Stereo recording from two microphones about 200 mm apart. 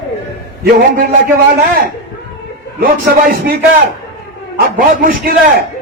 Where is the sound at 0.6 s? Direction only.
50° right (ahead or behind).